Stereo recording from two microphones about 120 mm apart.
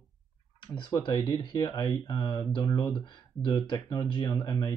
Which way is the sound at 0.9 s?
35° left (ahead or behind).